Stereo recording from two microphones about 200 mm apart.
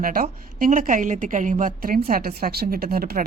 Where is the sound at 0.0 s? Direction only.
45° right (ahead or behind).